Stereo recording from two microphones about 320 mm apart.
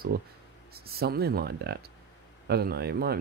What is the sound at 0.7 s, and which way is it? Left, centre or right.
Speech, right.